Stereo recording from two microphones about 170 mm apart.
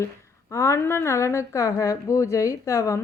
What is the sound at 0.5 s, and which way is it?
A woman's voice, 15° left (ahead or behind).